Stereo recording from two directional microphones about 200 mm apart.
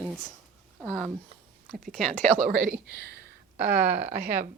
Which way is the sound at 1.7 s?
40° right (ahead or behind).